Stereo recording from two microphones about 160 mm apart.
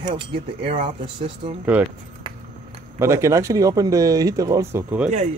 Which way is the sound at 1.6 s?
10° right (ahead or behind).